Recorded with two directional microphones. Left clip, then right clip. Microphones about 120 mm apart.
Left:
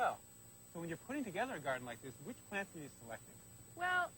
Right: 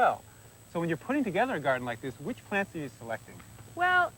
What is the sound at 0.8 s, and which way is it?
Speech, 35° right (ahead or behind).